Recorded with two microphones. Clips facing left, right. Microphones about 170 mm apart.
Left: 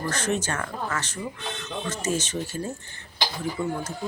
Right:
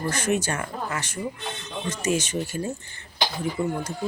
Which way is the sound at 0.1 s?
10° right (ahead or behind).